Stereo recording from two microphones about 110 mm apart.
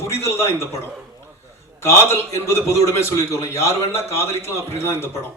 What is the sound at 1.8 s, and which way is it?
A man's voice, 25° left (ahead or behind).